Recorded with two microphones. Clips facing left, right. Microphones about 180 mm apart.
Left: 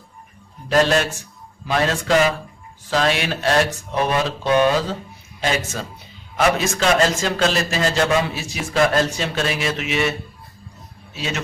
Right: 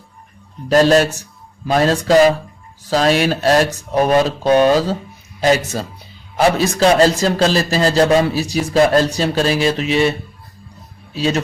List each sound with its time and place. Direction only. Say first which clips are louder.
0.7 s a man's voice: right 6 dB; 35° right (ahead or behind)